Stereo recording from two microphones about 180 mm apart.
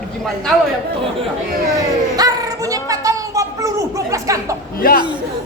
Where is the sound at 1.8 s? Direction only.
20° right (ahead or behind).